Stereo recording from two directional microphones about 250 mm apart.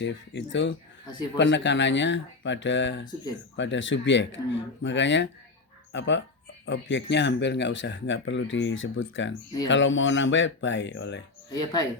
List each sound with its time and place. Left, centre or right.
0.0 s speech: left
1.0 s speech: centre
1.4 s speech: left
11.5 s speech: centre